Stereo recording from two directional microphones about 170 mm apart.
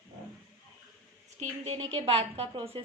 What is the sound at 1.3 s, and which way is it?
A woman's voice, 40° right (ahead or behind).